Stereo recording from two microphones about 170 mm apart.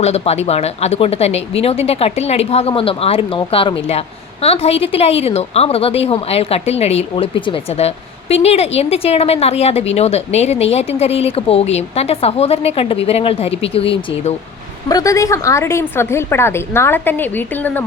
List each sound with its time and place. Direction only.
0.0 s a woman's voice: 40° left (ahead or behind)
14.8 s a woman's voice: 20° left (ahead or behind)